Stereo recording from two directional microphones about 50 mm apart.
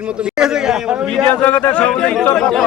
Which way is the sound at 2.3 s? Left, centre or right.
Centre.